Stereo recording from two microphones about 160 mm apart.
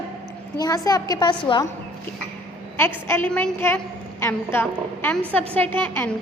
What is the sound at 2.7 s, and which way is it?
A woman's voice, 15° left (ahead or behind).